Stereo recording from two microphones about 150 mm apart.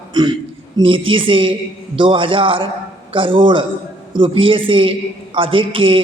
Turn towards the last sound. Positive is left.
turn(degrees=-35)  # may be behind; listen again after turning